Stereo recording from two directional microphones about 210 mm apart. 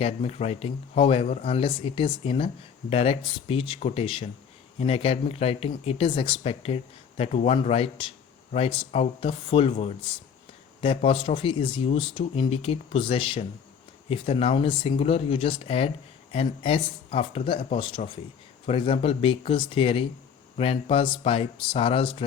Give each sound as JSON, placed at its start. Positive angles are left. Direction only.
{"t": 0.0, "sound": "speech", "side_deg": 30}